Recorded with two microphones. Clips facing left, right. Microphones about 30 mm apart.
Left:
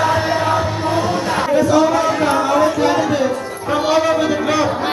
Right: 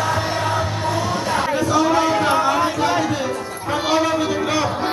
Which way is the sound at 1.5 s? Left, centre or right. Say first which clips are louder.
Left 5 dB; centre.